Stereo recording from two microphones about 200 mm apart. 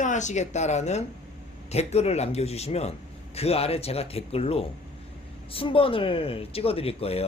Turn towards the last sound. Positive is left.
turn(degrees=30)  # may be behind; listen again after turning